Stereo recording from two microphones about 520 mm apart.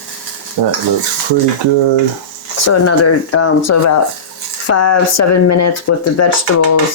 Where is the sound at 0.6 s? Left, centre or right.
Right.